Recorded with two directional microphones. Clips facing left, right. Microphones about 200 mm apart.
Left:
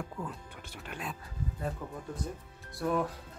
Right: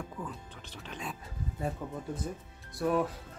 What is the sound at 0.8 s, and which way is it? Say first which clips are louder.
Speech: even; 5° left (ahead or behind).